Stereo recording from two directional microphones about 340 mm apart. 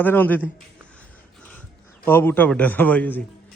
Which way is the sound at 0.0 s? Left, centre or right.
Centre.